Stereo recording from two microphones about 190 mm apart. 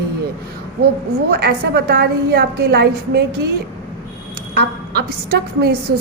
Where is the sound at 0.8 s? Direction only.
55° right (ahead or behind).